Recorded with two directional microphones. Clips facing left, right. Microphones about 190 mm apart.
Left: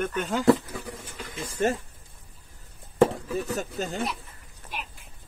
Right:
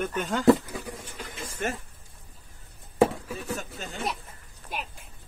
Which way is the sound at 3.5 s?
40° left (ahead or behind).